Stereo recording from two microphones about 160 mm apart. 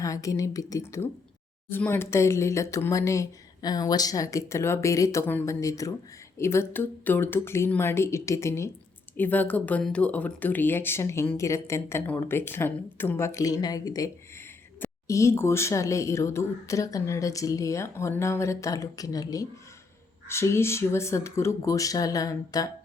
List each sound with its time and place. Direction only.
0.0 s speech: 20° left (ahead or behind)